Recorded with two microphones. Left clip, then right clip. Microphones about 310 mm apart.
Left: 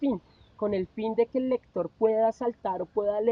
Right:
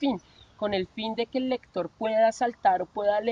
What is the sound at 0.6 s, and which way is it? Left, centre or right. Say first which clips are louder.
Speech: even; right.